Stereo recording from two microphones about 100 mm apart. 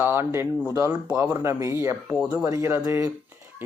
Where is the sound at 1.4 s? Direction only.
25° right (ahead or behind).